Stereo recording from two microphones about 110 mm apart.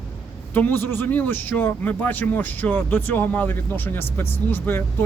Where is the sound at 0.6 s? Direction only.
20° left (ahead or behind).